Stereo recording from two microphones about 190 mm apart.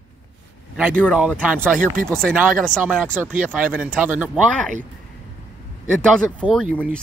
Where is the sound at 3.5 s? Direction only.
10° right (ahead or behind).